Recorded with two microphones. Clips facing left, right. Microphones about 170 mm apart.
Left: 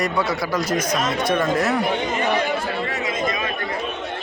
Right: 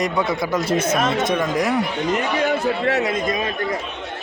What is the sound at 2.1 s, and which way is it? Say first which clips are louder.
Speech: right 2 dB; 65° right (ahead or behind).